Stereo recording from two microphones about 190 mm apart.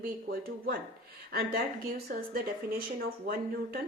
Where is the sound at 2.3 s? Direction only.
50° right (ahead or behind).